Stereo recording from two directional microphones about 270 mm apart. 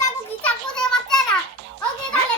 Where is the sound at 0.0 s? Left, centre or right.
Centre.